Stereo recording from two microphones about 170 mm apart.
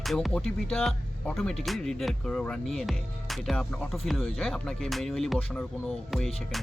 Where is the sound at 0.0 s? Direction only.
Centre (ahead or behind).